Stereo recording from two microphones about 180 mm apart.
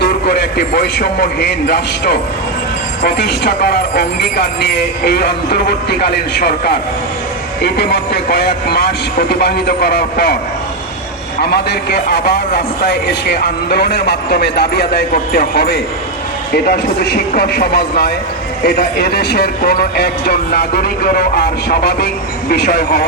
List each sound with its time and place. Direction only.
0.0 s a man's voice: 65° left (ahead or behind)
11.5 s speech: 65° left (ahead or behind)